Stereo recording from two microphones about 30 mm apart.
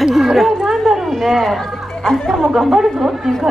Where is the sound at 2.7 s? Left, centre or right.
Centre.